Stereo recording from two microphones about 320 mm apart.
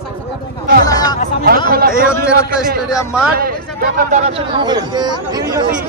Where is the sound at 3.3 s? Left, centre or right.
Right; by 5.6 s centre.